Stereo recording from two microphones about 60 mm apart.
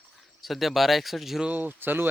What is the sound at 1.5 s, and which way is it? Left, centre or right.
Speech, right.